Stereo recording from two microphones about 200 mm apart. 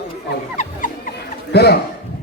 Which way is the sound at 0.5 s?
40° left (ahead or behind).